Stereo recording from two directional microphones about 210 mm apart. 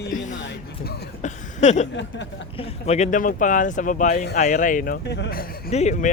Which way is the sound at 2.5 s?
30° left (ahead or behind).